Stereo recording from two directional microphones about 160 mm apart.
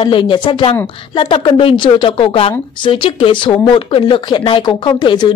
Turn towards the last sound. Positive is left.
turn(degrees=25)  # may be behind; listen again after turning